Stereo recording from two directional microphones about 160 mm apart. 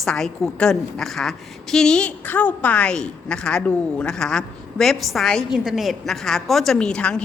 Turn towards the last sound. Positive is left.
turn(degrees=5)  # may be behind; listen again after turning